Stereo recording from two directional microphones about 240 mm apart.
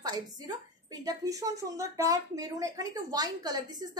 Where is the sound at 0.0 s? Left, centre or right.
Centre.